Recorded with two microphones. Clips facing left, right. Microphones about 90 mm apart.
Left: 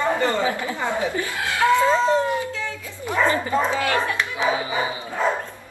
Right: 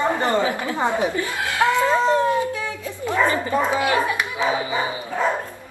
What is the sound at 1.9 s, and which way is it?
Dog, 15° right (ahead or behind).